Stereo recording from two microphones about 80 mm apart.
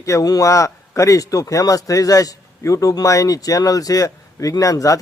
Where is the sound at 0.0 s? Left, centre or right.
Left.